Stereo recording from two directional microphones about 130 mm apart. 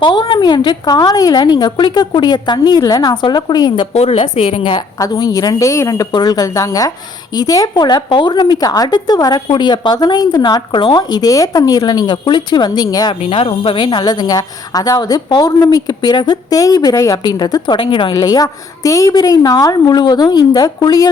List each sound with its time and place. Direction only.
0.0 s speech: 35° left (ahead or behind)
3.9 s a woman's voice: 50° left (ahead or behind)
4.9 s a woman's voice: 30° left (ahead or behind)